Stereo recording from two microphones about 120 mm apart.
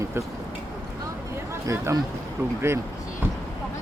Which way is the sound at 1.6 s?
25° right (ahead or behind).